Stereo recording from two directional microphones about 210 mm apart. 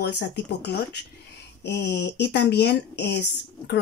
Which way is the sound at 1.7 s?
55° left (ahead or behind).